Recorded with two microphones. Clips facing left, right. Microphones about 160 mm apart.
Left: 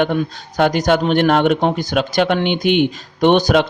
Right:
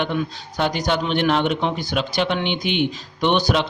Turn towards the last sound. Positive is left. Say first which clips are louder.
# left 6 dB
turn(degrees=45)  # may be behind; listen again after turning